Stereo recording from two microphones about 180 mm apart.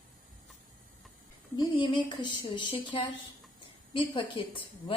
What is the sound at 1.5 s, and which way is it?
A woman's voice, 25° left (ahead or behind).